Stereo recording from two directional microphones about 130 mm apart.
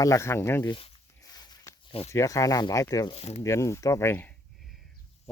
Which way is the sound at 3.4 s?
20° left (ahead or behind).